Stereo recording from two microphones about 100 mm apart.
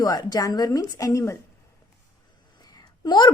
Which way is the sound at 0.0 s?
40° left (ahead or behind).